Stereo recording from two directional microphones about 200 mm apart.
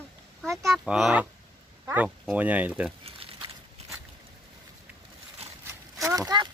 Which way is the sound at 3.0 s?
30° right (ahead or behind).